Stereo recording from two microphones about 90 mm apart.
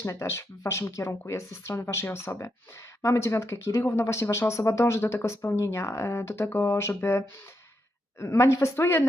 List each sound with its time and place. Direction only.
0.0 s speech: 30° left (ahead or behind)